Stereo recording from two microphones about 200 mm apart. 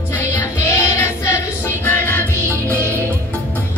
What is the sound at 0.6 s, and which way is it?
Music, 15° left (ahead or behind).